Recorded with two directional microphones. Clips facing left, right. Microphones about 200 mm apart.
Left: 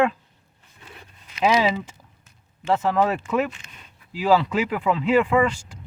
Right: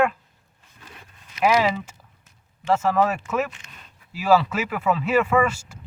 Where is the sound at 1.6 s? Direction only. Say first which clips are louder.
Left 1 dB; 15° left (ahead or behind).